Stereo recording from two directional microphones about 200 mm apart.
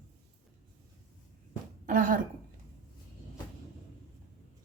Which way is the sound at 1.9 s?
45° right (ahead or behind).